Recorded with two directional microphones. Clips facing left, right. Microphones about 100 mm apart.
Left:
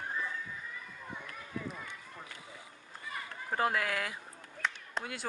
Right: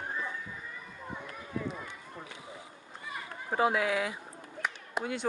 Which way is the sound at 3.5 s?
5° right (ahead or behind).